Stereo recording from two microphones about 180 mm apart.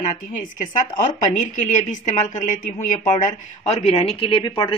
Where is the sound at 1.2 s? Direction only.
45° left (ahead or behind).